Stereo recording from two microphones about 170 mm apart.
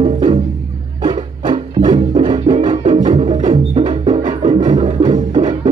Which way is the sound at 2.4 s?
35° right (ahead or behind).